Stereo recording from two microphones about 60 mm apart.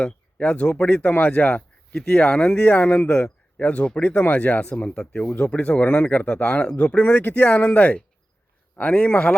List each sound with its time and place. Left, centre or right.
0.0 s speech: centre